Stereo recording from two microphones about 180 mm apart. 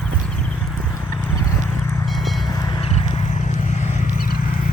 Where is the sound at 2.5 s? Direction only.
20° left (ahead or behind); by 4.3 s 50° left (ahead or behind).